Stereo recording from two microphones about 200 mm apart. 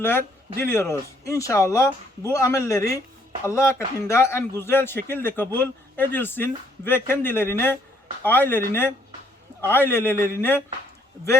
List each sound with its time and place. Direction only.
0.6 s a man's voice: 10° left (ahead or behind)